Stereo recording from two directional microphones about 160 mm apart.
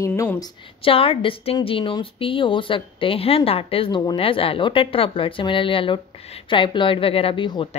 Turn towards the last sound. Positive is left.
turn(degrees=30)  # may be behind; listen again after turning